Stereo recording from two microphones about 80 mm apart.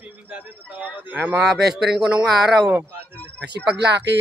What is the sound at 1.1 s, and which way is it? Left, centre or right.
Speech, right.